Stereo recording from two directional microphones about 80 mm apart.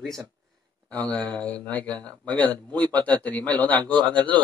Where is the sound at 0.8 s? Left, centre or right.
Centre.